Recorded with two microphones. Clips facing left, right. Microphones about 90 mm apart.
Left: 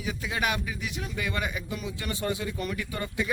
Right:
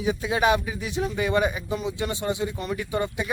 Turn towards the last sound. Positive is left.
turn(degrees=-25)  # may be behind; listen again after turning